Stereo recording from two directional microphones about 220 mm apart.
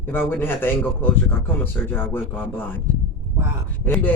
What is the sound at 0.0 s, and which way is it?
Speech, 10° left (ahead or behind).